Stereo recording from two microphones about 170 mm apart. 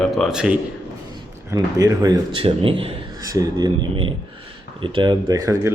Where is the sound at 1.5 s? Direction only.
20° right (ahead or behind).